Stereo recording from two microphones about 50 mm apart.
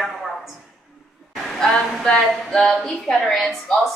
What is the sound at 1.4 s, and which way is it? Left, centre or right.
A woman's voice, centre.